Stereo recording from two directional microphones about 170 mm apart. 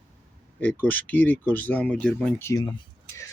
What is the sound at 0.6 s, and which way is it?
Speech, 10° left (ahead or behind).